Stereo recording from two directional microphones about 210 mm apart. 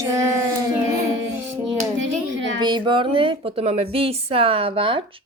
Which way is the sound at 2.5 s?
20° right (ahead or behind).